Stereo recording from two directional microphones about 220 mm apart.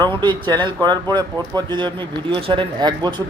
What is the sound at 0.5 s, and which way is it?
Speech, 20° right (ahead or behind).